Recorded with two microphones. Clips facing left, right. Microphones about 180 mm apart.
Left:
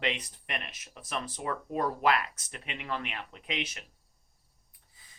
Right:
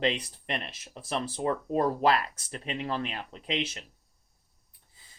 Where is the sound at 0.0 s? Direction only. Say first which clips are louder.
Right 5 dB; 30° right (ahead or behind).